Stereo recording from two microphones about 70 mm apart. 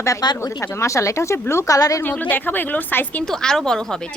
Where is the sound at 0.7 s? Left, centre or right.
Left.